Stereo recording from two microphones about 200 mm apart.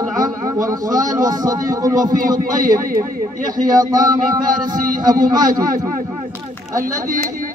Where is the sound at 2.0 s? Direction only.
40° right (ahead or behind).